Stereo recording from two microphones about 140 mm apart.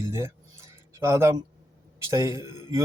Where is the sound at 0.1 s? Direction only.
20° right (ahead or behind).